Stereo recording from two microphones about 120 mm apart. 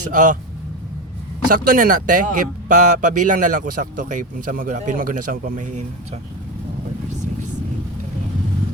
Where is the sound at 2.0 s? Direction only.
90° right.